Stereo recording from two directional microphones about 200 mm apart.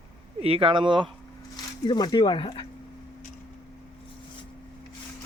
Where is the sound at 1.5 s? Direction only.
20° left (ahead or behind).